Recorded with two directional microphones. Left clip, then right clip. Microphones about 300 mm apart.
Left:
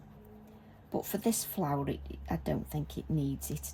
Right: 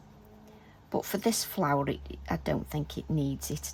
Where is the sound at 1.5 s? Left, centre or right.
Centre.